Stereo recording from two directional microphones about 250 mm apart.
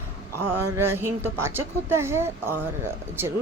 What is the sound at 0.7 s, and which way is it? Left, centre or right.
Speech, centre.